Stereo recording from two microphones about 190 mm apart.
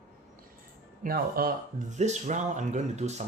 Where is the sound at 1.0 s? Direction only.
50° right (ahead or behind).